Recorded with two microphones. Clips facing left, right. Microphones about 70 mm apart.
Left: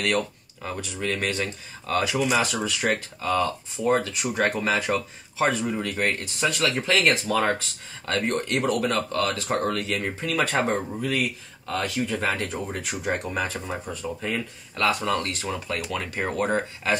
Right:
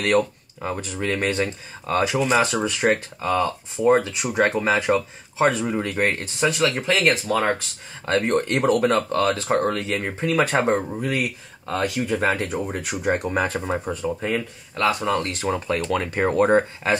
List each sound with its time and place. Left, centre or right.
0.0 s speech: right
2.6 s speech: right
6.8 s speech: centre
8.0 s speech: right
11.2 s speech: right
11.8 s speech: centre
13.3 s speech: right
13.6 s speech: right
14.8 s speech: centre
15.4 s speech: right